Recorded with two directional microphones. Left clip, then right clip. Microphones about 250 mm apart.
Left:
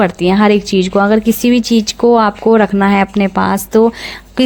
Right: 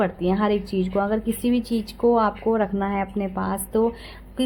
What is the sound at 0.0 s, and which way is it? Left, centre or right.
Speech, left.